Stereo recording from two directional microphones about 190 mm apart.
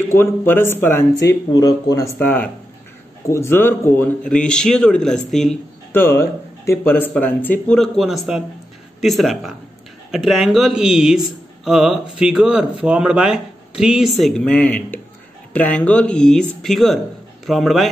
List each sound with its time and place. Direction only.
0.1 s speech: 10° left (ahead or behind)
5.9 s speech: 15° left (ahead or behind)